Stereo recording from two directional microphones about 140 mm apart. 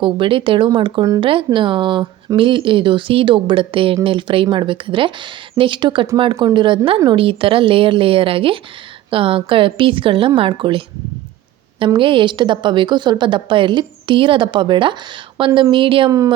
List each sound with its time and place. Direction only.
0.0 s a woman's voice: 40° right (ahead or behind)
11.9 s a woman's voice: 35° right (ahead or behind)